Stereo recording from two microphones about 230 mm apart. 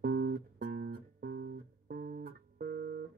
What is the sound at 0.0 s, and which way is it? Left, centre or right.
Music, right.